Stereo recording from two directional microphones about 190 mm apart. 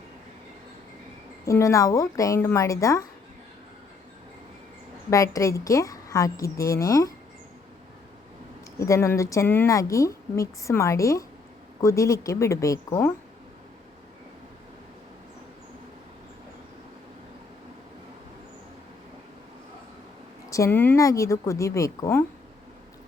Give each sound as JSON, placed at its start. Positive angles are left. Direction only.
{"t": 1.5, "sound": "speech", "side_deg": 15}
{"t": 5.1, "sound": "speech", "side_deg": 15}
{"t": 8.8, "sound": "speech", "side_deg": 15}
{"t": 20.5, "sound": "speech", "side_deg": 15}